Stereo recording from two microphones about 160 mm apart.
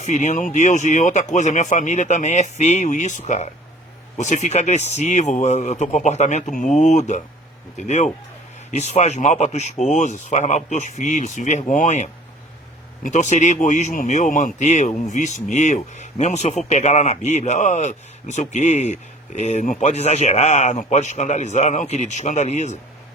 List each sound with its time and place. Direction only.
0.0 s speech: 45° left (ahead or behind)